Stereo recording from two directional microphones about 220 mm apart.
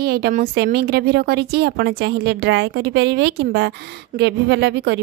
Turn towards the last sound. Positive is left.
turn(degrees=-50)  # may be behind; listen again after turning